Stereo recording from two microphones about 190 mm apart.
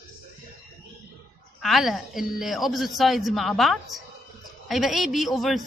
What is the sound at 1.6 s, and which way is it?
A woman's voice, centre (ahead or behind).